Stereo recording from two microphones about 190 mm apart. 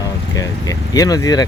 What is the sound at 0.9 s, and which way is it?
Speech, 20° left (ahead or behind).